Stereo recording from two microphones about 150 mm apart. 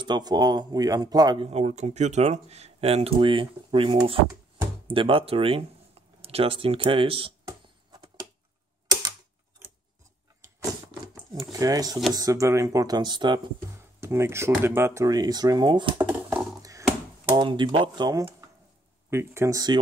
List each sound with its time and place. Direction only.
0.0 s speech: 30° right (ahead or behind)
1.5 s speech: 45° right (ahead or behind)
7.4 s a sound: 25° right (ahead or behind)
11.5 s speech: 25° right (ahead or behind)
14.0 s speech: 15° right (ahead or behind)
16.0 s a sound: 10° right (ahead or behind)
17.4 s speech: 30° right (ahead or behind)
19.0 s speech: 15° right (ahead or behind)